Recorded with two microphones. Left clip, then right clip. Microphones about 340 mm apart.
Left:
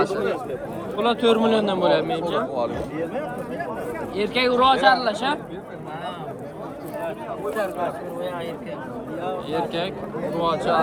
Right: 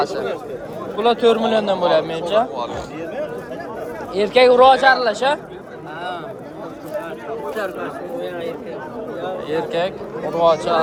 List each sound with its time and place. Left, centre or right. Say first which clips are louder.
0.9 s a man's voice: right 4 dB; centre
2.6 s a man's voice: even; centre
4.1 s a man's voice: right 9 dB; centre
9.5 s a man's voice: right 7 dB; centre